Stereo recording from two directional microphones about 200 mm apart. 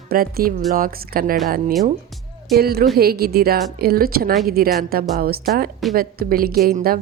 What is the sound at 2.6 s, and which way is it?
A woman's voice, 50° right (ahead or behind).